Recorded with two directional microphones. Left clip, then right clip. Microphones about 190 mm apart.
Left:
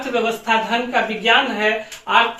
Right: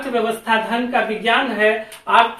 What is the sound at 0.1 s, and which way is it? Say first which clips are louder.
Speech: even; 15° left (ahead or behind).